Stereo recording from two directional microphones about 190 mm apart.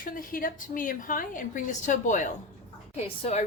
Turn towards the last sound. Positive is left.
turn(degrees=35)  # may be behind; listen again after turning